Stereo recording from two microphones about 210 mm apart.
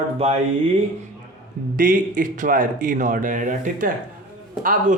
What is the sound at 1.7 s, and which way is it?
Speech, 40° right (ahead or behind).